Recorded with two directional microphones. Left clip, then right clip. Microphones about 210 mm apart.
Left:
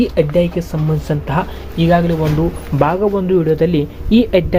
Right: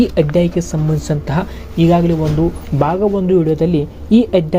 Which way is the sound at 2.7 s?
15° right (ahead or behind).